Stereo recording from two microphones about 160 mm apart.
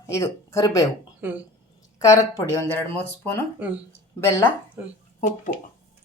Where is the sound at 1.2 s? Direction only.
10° right (ahead or behind).